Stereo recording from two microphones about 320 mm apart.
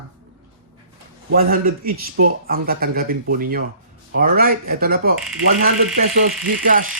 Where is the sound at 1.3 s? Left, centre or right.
Right.